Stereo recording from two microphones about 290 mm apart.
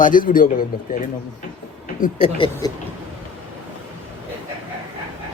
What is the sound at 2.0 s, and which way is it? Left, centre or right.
Speech, centre.